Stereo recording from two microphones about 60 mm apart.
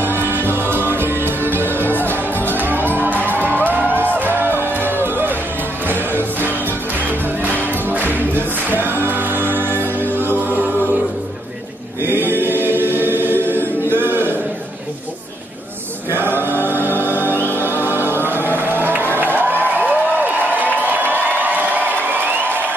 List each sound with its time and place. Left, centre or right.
0.0 s music: right
7.9 s music: right
12.0 s choir: right
16.1 s a capella: right
17.6 s music: right
20.8 s crowd: right
22.1 s a sound: right